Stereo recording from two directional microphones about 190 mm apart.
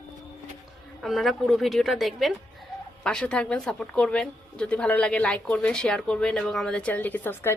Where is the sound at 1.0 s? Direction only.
Centre (ahead or behind).